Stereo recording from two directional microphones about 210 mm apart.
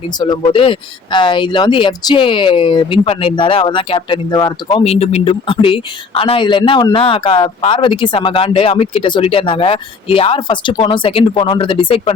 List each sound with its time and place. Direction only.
0.2 s speech: 20° left (ahead or behind)